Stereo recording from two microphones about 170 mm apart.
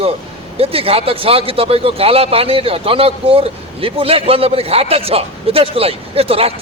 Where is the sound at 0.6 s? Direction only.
35° right (ahead or behind).